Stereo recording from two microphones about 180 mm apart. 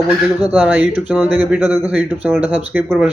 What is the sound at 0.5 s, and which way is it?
Speech, 10° right (ahead or behind).